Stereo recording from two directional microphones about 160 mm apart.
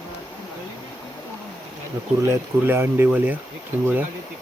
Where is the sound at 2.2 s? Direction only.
15° right (ahead or behind).